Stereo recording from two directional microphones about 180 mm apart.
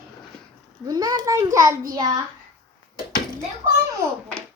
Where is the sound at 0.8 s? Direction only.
20° right (ahead or behind).